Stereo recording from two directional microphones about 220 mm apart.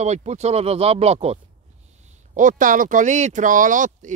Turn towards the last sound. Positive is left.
turn(degrees=-35)  # may be behind; listen again after turning